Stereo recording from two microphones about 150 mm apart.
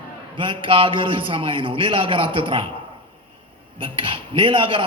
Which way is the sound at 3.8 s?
35° right (ahead or behind).